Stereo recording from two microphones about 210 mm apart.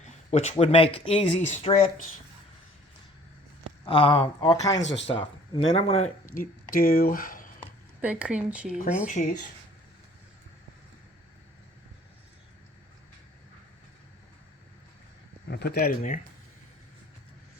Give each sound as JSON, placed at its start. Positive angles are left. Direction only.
{"t": 0.3, "sound": "speech", "side_deg": 30}
{"t": 3.8, "sound": "speech", "side_deg": 25}
{"t": 8.0, "sound": "speech", "side_deg": -5}
{"t": 9.0, "sound": "speech", "side_deg": 35}
{"t": 15.4, "sound": "speech", "side_deg": 50}